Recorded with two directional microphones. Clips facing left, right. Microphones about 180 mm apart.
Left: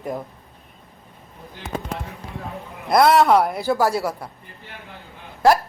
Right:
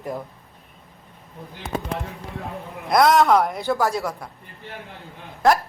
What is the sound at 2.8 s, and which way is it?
Speech, 5° left (ahead or behind).